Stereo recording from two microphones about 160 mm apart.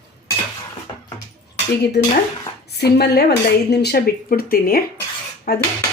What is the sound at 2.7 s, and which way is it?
Speech, 90° left.